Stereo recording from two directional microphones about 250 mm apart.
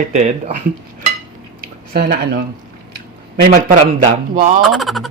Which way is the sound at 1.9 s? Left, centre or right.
Right.